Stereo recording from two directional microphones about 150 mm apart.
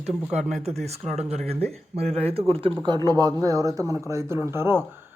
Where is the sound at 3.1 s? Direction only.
25° right (ahead or behind).